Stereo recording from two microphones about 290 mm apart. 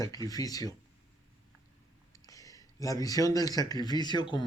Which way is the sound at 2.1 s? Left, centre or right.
Centre.